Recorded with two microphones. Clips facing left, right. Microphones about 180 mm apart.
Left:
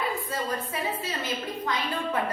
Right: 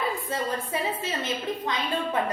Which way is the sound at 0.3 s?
25° right (ahead or behind).